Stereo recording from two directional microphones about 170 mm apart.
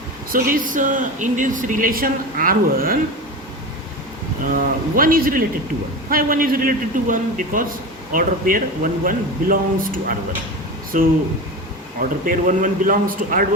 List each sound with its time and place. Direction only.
0.3 s speech: 55° right (ahead or behind)
4.5 s speech: 55° right (ahead or behind)